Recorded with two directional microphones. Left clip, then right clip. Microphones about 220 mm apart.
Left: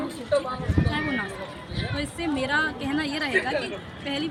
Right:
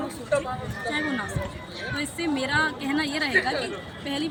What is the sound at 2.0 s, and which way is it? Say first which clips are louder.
A woman's voice: even; 5° right (ahead or behind).